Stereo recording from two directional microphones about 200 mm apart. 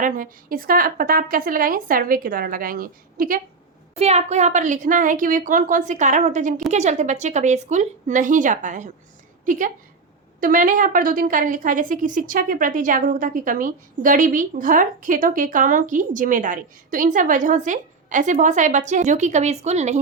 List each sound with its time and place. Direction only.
0.0 s a woman's voice: 45° right (ahead or behind)
3.9 s a woman's voice: 30° right (ahead or behind)